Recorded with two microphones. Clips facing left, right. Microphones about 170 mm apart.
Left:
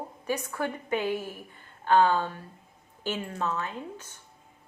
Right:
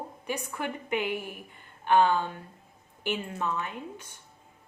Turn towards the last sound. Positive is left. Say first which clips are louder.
# left 1 dB
turn(degrees=-15)  # may be behind; listen again after turning